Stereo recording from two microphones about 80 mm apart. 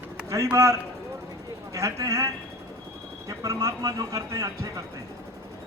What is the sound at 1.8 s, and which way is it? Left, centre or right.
Speech, right.